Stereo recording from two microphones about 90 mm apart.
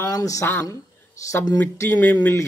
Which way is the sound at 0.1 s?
40° left (ahead or behind).